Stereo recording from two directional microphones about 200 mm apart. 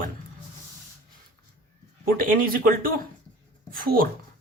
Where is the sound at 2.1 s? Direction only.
45° right (ahead or behind).